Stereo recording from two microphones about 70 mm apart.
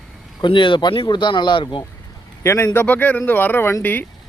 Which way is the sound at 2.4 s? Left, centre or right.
Left.